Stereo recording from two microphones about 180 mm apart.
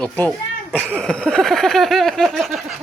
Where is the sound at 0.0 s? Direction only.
5° left (ahead or behind).